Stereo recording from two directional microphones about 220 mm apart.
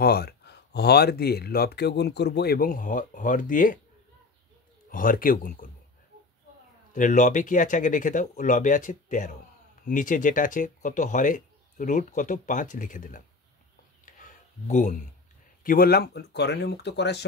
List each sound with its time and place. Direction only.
0.0 s speech: 45° left (ahead or behind)
4.9 s speech: 40° left (ahead or behind)
6.9 s speech: 35° left (ahead or behind)
14.0 s a sound: 35° left (ahead or behind)
15.6 s speech: 40° left (ahead or behind)